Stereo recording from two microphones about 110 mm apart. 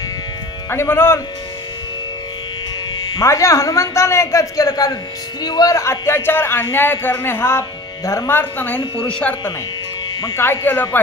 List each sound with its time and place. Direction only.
0.7 s a man's voice: 20° left (ahead or behind)
3.2 s a man's voice: 25° left (ahead or behind)